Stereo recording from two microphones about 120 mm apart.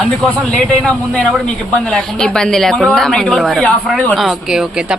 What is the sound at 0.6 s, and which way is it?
A woman's voice, 5° left (ahead or behind).